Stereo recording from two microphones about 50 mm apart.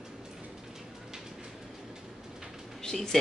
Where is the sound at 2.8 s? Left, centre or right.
Centre.